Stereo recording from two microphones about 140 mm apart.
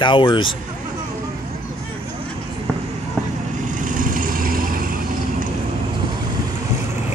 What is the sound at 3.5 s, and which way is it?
Vehicle, 65° right (ahead or behind).